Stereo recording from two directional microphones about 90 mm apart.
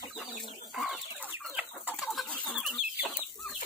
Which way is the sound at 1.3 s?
20° right (ahead or behind).